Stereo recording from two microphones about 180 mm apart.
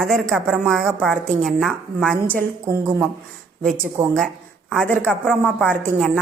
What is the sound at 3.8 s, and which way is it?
Speech, 15° right (ahead or behind).